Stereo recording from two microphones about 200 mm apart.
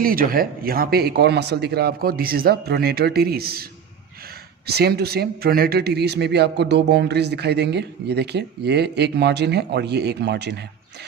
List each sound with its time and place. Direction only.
0.0 s speech: 45° right (ahead or behind)